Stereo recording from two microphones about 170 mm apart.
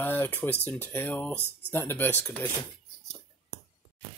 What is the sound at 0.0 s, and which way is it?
Speech, 10° left (ahead or behind).